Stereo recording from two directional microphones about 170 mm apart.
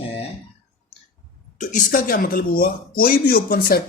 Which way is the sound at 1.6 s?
50° left (ahead or behind).